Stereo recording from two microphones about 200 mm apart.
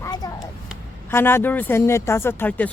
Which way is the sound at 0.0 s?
20° left (ahead or behind).